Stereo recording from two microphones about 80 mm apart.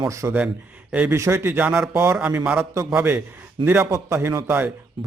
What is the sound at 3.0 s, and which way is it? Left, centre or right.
Speech, right.